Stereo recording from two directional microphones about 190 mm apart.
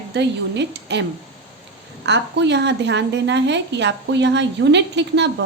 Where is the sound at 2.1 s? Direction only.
65° right (ahead or behind).